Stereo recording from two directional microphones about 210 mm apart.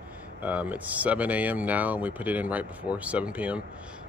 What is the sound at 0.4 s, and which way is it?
Speech, 10° right (ahead or behind).